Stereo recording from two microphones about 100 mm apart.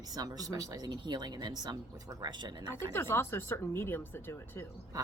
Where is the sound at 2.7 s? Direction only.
25° left (ahead or behind).